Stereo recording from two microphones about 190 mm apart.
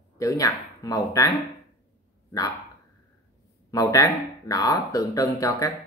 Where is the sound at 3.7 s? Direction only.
20° left (ahead or behind).